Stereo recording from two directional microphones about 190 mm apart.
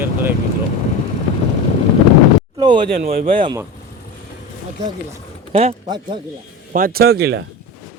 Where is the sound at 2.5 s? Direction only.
25° right (ahead or behind).